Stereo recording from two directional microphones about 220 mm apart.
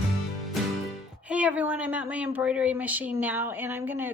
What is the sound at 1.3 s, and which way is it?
Speech, 5° right (ahead or behind).